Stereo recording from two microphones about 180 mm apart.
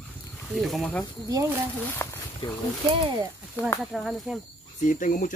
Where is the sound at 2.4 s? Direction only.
25° left (ahead or behind).